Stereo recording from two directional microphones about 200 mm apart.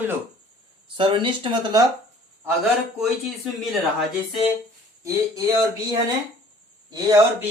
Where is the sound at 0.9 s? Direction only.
25° right (ahead or behind).